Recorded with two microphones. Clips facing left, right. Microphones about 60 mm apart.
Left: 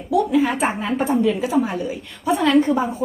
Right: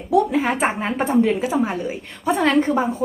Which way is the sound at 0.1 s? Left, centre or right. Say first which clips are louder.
Even; right.